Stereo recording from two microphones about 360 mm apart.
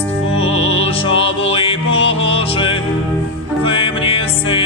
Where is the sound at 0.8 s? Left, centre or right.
Centre.